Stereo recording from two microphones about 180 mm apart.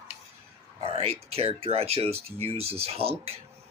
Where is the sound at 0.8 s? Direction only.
35° right (ahead or behind).